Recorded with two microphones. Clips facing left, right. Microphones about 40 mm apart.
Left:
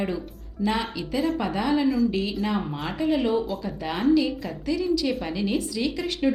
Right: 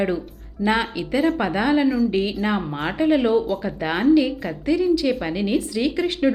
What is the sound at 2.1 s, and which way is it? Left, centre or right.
A woman's voice, right.